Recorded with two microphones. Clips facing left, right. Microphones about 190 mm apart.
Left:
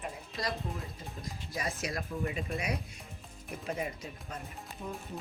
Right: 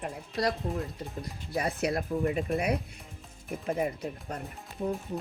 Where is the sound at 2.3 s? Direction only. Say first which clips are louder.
Right 7 dB; 55° right (ahead or behind).